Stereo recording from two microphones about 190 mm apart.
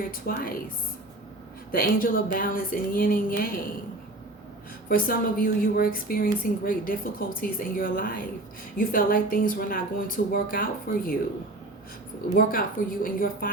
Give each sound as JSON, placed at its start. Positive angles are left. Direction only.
{"t": 0.1, "sound": "a woman's voice", "side_deg": 50}
{"t": 1.7, "sound": "a woman's voice", "side_deg": 50}
{"t": 4.9, "sound": "a woman's voice", "side_deg": 50}
{"t": 12.4, "sound": "a woman's voice", "side_deg": 50}